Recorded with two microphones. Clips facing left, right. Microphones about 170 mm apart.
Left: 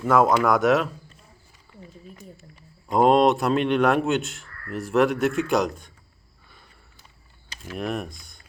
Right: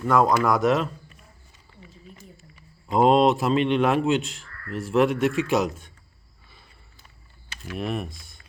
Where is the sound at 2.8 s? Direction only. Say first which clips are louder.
Even; centre (ahead or behind).